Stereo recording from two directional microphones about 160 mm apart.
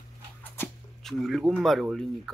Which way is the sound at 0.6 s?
15° left (ahead or behind).